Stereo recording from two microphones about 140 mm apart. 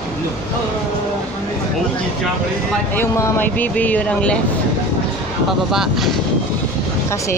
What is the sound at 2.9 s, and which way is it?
Speech, 15° left (ahead or behind).